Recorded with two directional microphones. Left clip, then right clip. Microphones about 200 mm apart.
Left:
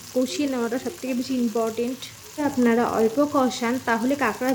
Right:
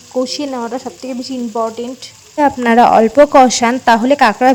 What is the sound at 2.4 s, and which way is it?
Speech, 50° right (ahead or behind).